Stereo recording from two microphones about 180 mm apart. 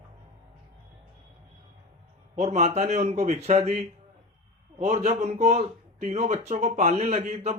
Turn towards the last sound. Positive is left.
turn(degrees=-40)  # may be behind; listen again after turning